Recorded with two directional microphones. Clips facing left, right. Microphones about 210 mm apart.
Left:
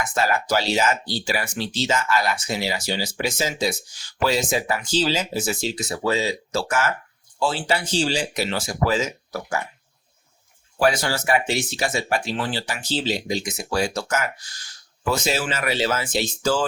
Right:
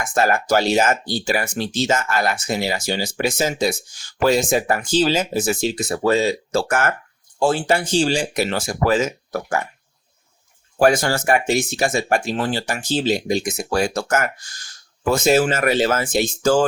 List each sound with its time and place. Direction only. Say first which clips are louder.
0.0 s speech: right 4 dB; 50° right (ahead or behind)
10.8 s speech: right 5 dB; 50° right (ahead or behind)